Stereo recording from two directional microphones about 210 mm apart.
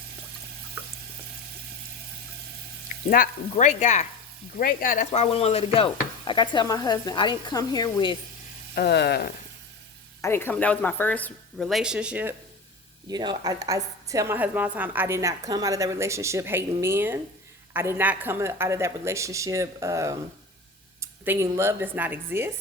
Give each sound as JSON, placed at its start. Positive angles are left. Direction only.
{"t": 3.1, "sound": "speech", "side_deg": 40}
{"t": 4.5, "sound": "stir", "side_deg": 40}
{"t": 8.7, "sound": "speech", "side_deg": 50}
{"t": 10.2, "sound": "speech", "side_deg": 10}
{"t": 13.1, "sound": "a woman's voice", "side_deg": -20}